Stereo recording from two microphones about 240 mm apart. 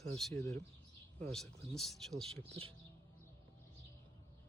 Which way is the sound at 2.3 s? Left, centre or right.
Right.